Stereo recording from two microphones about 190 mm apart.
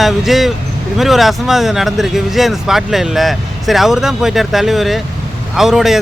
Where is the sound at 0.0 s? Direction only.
Centre (ahead or behind).